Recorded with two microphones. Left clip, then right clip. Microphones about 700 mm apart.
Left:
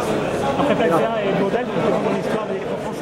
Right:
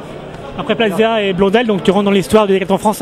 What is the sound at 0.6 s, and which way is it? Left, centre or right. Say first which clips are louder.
A man's voice: right 7 dB; right.